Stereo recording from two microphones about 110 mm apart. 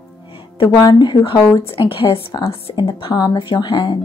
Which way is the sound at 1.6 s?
60° left (ahead or behind).